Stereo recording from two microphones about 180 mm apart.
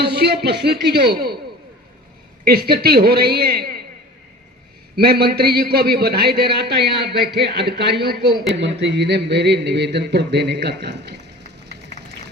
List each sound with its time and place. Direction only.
0.0 s speech: 65° right (ahead or behind)
2.4 s a man's voice: 60° right (ahead or behind)
4.9 s a man's voice: 60° right (ahead or behind)
8.8 s speech: 70° right (ahead or behind)